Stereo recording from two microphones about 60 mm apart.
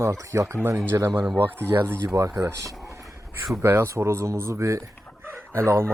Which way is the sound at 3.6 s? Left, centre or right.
Right.